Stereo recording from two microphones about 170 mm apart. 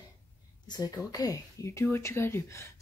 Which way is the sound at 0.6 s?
25° left (ahead or behind).